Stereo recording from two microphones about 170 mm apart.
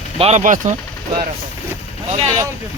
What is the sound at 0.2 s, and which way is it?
Speech, 40° right (ahead or behind).